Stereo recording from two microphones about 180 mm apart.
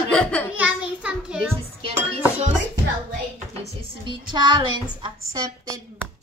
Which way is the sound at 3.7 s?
25° right (ahead or behind).